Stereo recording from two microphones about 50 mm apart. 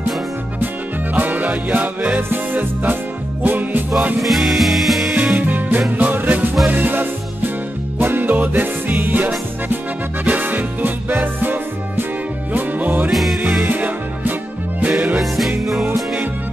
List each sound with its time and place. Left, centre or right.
1.1 s music: right
4.2 s music: centre
5.1 s music: right
13.1 s music: centre
13.7 s music: right
15.1 s music: centre